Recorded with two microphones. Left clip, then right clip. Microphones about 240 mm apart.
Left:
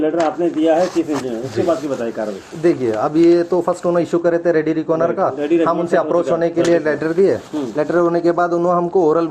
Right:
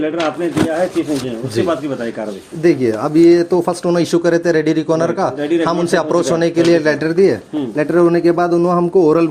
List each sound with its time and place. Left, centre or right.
2.6 s speech: right